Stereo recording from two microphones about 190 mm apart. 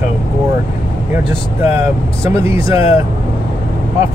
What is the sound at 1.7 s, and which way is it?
Speech, 15° right (ahead or behind).